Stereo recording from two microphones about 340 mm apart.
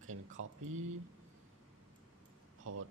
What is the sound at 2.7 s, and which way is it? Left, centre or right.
Speech, right.